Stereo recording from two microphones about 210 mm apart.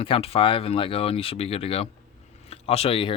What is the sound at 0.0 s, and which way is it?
Speech, 25° left (ahead or behind).